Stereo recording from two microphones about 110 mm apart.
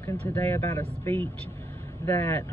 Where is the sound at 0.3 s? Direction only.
20° left (ahead or behind).